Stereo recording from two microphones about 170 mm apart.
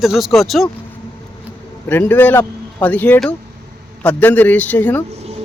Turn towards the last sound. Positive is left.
turn(degrees=10)  # may be behind; listen again after turning